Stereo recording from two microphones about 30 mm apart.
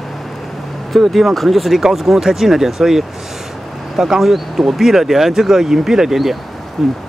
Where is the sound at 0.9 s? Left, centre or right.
Centre.